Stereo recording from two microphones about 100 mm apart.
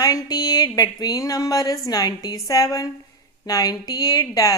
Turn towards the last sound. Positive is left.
turn(degrees=35)  # may be behind; listen again after turning